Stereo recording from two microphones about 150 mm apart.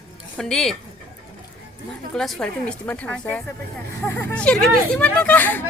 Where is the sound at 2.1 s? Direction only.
Centre (ahead or behind).